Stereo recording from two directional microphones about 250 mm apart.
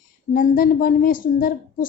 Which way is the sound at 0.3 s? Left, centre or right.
Left.